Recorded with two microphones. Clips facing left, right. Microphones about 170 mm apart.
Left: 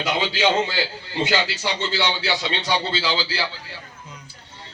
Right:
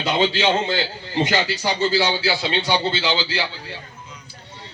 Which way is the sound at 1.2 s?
40° right (ahead or behind).